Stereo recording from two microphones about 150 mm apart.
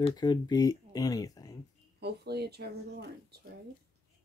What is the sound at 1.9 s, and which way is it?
Speech, 90° right.